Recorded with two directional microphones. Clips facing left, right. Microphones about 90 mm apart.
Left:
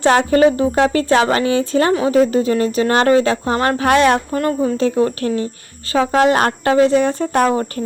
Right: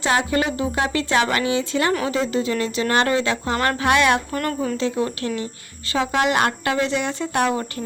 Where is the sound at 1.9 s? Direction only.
30° left (ahead or behind).